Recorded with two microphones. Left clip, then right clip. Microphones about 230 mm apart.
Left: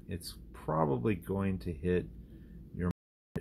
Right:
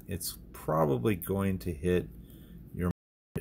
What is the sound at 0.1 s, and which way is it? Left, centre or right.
Speech, right.